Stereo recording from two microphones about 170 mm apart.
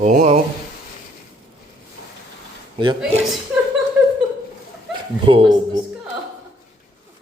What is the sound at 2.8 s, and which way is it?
Speech, 25° right (ahead or behind).